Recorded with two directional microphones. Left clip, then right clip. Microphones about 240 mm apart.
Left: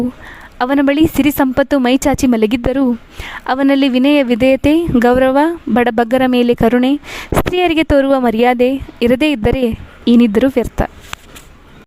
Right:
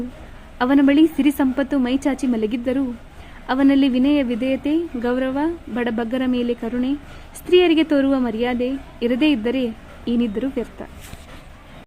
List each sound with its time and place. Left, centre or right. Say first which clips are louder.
0.6 s speech: left 3 dB; left